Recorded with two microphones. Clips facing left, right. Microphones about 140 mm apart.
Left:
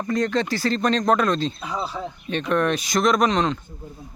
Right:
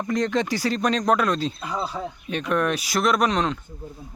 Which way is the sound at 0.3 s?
15° right (ahead or behind).